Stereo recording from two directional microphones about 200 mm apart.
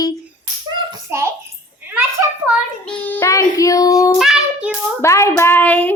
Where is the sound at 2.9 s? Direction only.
10° left (ahead or behind).